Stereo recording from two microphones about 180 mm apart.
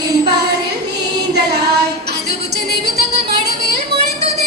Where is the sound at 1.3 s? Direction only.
65° right (ahead or behind).